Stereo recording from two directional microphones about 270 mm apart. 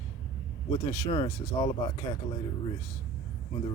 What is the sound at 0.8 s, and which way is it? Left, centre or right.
Speech, centre.